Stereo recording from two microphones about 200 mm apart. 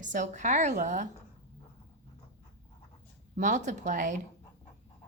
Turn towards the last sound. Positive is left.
turn(degrees=-40)  # may be behind; listen again after turning